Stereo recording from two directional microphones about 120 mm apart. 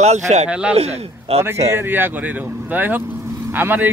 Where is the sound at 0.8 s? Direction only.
60° right (ahead or behind).